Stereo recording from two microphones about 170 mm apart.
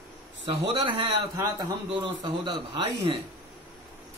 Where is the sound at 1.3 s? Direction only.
20° right (ahead or behind).